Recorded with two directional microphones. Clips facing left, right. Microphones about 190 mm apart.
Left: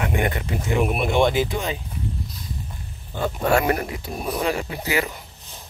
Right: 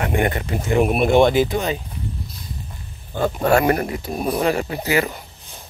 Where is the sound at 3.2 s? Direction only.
45° right (ahead or behind).